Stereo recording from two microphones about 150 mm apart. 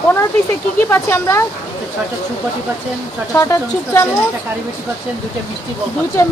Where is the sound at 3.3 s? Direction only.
20° left (ahead or behind).